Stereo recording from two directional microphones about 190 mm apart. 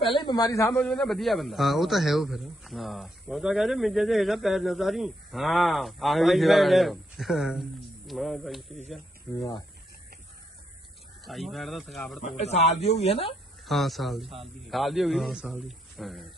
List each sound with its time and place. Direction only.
0.0 s a man's voice: 25° left (ahead or behind)
0.7 s speech: 5° left (ahead or behind)
9.3 s speech: 15° left (ahead or behind)
11.3 s speech: centre (ahead or behind)
12.2 s speech: 35° left (ahead or behind)
13.7 s speech: centre (ahead or behind)